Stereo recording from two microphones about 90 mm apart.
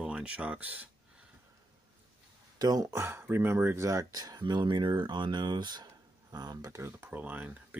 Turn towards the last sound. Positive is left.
turn(degrees=-20)  # may be behind; listen again after turning